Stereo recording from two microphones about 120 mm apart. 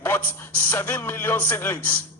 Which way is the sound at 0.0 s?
20° left (ahead or behind).